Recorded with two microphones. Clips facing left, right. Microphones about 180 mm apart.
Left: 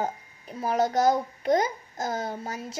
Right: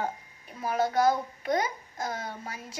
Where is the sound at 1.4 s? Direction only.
40° left (ahead or behind).